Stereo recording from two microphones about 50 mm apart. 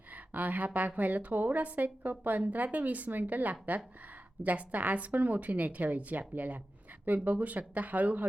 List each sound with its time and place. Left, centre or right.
0.1 s a woman's voice: right